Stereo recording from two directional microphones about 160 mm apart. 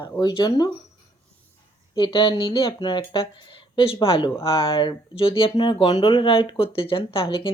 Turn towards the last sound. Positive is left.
turn(degrees=35)  # may be behind; listen again after turning